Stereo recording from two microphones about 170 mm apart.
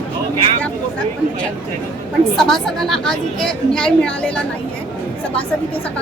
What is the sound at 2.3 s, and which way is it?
A woman's voice, centre (ahead or behind).